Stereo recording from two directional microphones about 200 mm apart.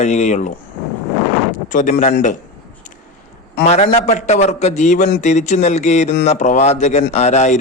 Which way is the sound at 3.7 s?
35° left (ahead or behind).